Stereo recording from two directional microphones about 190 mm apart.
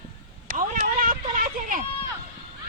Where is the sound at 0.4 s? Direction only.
45° right (ahead or behind).